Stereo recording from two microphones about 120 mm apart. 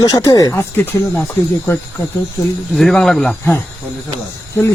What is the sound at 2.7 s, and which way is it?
Speech, centre (ahead or behind).